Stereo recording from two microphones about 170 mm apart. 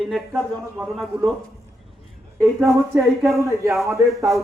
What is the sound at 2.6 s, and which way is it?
Speech, centre (ahead or behind).